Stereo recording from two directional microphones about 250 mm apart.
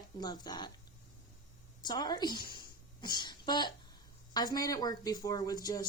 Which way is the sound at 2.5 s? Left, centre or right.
Centre.